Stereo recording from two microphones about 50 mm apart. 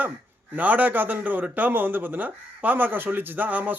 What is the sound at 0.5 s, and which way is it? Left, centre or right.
A man's voice, right.